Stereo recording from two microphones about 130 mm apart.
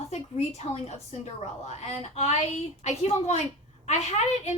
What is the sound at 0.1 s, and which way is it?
A woman's voice, 60° left (ahead or behind).